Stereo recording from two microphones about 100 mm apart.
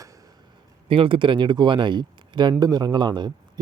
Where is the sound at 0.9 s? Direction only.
60° right (ahead or behind).